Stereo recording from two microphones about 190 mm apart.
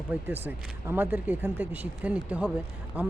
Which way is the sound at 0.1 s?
10° right (ahead or behind).